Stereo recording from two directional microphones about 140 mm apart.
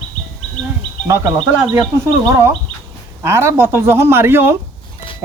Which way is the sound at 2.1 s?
25° right (ahead or behind).